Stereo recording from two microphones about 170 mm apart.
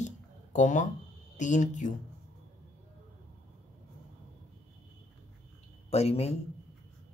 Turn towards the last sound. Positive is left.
turn(degrees=35)  # may be behind; listen again after turning